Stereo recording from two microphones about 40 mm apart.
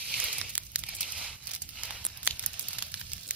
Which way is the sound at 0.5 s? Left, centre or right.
Right.